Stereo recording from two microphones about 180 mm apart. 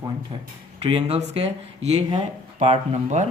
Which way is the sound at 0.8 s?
35° right (ahead or behind).